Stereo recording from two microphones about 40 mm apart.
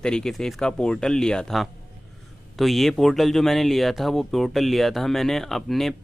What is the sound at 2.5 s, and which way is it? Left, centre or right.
Speech, centre.